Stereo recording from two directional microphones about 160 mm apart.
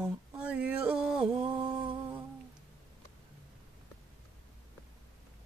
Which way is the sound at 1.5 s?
30° right (ahead or behind).